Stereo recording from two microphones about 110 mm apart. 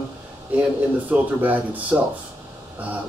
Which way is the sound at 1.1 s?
15° right (ahead or behind).